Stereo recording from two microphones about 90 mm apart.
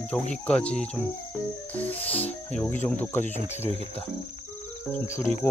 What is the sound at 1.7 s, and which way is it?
Music, 20° left (ahead or behind).